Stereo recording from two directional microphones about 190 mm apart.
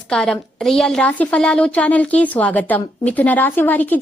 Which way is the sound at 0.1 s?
5° left (ahead or behind).